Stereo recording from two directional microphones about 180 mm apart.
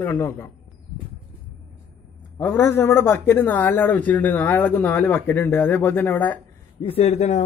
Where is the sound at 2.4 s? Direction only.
10° left (ahead or behind).